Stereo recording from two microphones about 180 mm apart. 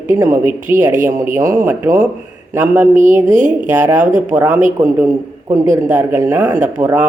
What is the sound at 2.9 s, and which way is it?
Speech, 45° right (ahead or behind).